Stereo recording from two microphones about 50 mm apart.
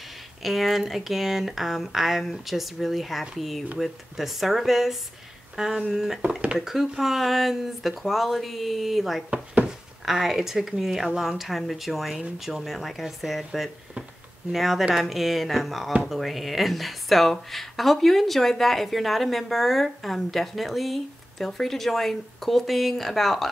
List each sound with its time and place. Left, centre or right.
0.4 s speech: centre